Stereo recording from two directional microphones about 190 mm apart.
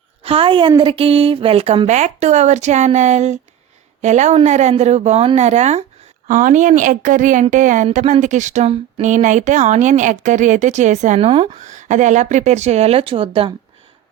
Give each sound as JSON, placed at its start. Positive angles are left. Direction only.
{"t": 0.2, "sound": "a woman's voice", "side_deg": -30}